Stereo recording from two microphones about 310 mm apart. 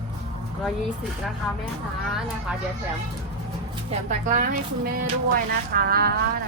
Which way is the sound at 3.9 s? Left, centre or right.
Right.